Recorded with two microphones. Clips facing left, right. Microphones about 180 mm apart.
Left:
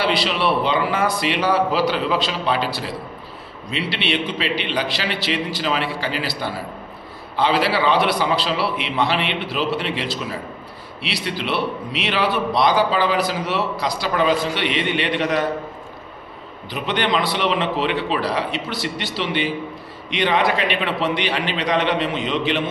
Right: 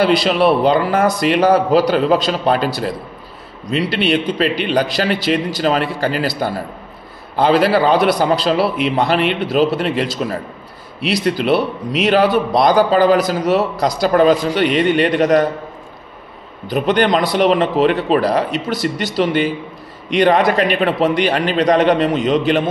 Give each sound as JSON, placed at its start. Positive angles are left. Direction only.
{"t": 0.0, "sound": "a man's voice", "side_deg": -45}
{"t": 16.6, "sound": "a man's voice", "side_deg": -45}